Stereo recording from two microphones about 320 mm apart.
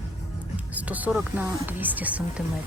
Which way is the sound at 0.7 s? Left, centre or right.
Centre.